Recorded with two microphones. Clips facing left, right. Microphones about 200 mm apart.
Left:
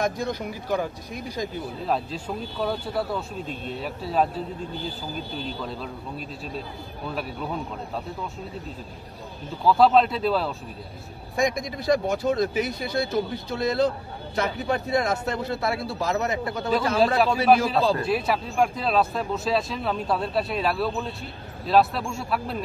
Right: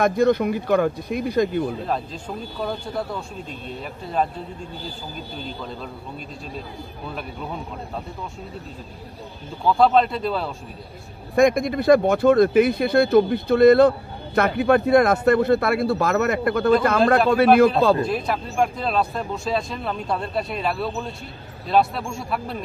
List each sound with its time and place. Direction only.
0.0 s speech: 60° right (ahead or behind)
1.9 s speech: 5° left (ahead or behind)
5.6 s speech: centre (ahead or behind)
9.7 s speech: centre (ahead or behind)
11.3 s speech: 60° right (ahead or behind)
18.0 s speech: 5° left (ahead or behind)